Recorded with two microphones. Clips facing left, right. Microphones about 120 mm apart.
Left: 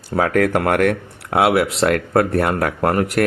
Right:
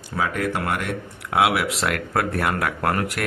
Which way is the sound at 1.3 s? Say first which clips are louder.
Left 4 dB; 40° left (ahead or behind).